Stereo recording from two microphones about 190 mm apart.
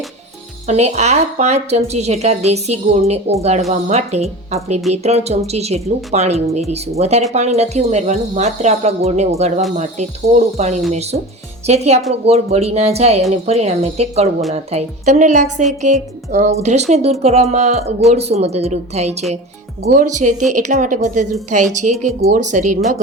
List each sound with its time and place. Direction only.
0.7 s a woman's voice: 35° right (ahead or behind)